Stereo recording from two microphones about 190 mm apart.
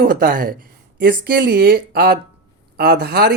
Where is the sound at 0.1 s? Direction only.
50° right (ahead or behind).